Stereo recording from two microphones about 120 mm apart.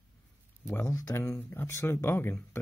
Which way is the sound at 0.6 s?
25° left (ahead or behind).